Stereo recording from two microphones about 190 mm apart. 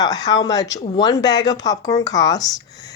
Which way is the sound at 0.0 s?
20° left (ahead or behind).